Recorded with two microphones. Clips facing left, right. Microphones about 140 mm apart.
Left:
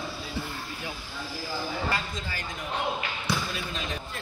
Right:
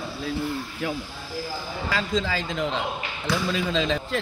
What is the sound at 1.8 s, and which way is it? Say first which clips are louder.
A man's voice: right 6 dB; 90° right.